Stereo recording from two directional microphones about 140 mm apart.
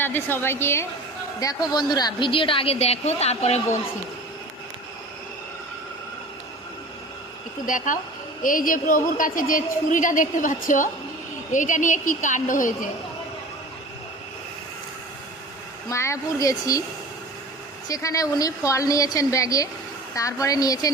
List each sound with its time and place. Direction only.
0.0 s a woman's voice: 15° left (ahead or behind); by 3.8 s 50° left (ahead or behind)
7.6 s a woman's voice: 70° left (ahead or behind)
15.9 s a woman's voice: 20° left (ahead or behind)
17.8 s a woman's voice: 25° left (ahead or behind)